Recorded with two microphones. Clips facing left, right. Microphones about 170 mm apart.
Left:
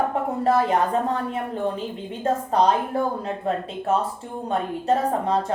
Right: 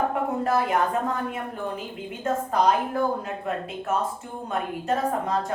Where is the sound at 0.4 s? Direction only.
30° left (ahead or behind).